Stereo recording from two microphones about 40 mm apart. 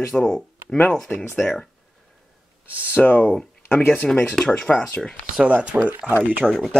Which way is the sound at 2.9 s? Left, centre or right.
Left.